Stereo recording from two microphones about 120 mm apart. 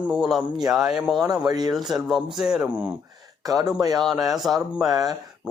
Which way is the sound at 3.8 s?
30° right (ahead or behind).